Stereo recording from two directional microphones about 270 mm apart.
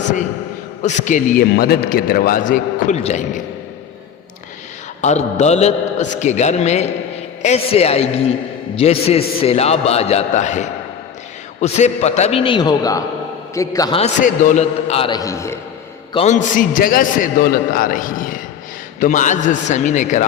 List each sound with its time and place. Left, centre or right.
0.8 s a man's voice: left
4.9 s a man's voice: left
16.1 s a man's voice: left